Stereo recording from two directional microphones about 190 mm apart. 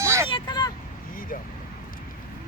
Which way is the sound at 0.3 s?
25° left (ahead or behind).